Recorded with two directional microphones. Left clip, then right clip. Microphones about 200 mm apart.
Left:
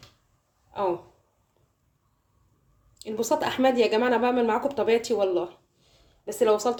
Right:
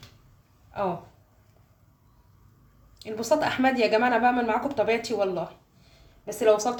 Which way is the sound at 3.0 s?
35° left (ahead or behind).